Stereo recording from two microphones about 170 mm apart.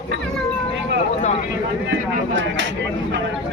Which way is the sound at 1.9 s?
90° right.